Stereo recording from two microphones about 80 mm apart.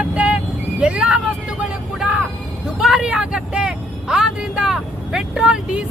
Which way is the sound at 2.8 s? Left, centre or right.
Centre.